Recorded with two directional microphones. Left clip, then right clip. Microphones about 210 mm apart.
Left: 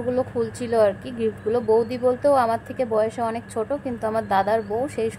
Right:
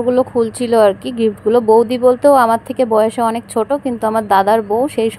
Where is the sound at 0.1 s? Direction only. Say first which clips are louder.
Right 9 dB; 25° right (ahead or behind).